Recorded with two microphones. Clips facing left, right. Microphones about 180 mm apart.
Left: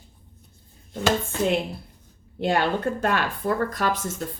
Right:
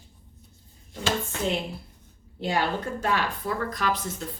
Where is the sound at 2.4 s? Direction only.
60° left (ahead or behind).